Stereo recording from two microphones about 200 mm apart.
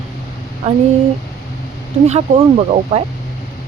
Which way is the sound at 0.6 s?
35° right (ahead or behind).